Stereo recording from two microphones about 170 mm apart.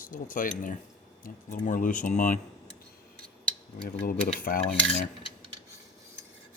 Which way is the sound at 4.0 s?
60° left (ahead or behind).